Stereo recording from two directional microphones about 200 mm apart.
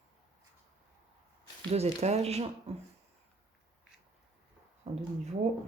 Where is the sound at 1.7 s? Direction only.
30° right (ahead or behind).